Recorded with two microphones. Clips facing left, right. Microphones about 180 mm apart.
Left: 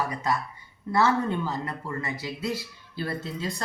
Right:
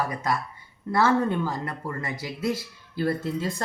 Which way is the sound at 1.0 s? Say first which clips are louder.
Right 2 dB; 50° right (ahead or behind).